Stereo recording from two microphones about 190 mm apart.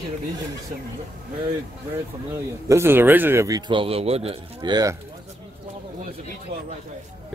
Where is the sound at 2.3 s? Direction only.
10° right (ahead or behind); by 4.4 s 30° right (ahead or behind).